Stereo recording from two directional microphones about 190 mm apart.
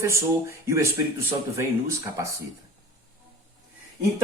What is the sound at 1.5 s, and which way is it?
Speech, 15° right (ahead or behind).